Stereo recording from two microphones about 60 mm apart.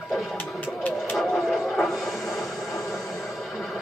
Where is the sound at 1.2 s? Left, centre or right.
Centre.